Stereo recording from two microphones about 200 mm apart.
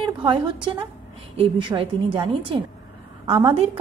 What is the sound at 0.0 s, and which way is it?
Speech, 25° right (ahead or behind).